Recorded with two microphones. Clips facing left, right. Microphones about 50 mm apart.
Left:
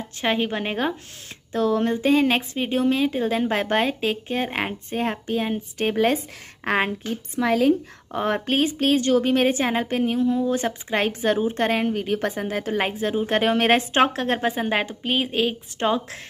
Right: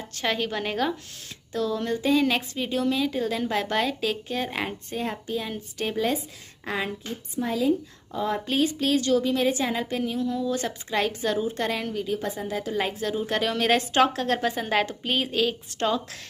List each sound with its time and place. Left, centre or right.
0.2 s a woman's voice: left
6.6 s speech: left
7.3 s a woman's voice: left